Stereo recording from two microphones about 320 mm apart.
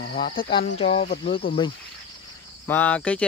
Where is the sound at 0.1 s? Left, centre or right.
Centre.